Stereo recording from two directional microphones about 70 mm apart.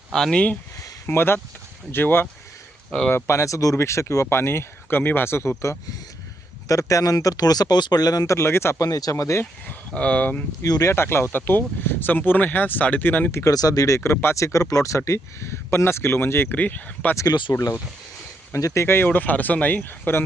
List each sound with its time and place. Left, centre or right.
0.1 s speech: centre
1.0 s speech: left
6.7 s speech: left
8.8 s speech: left
9.6 s speech: centre
10.6 s speech: left
10.9 s speech: left
13.5 s speech: left
16.6 s speech: left
18.5 s speech: left